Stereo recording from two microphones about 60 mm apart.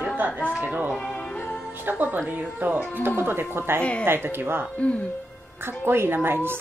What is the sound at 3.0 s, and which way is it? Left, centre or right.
Speech, right.